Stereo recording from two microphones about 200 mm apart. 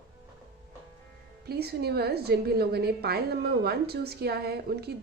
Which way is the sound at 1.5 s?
55° right (ahead or behind).